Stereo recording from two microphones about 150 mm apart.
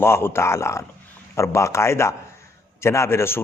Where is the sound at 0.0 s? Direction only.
15° left (ahead or behind).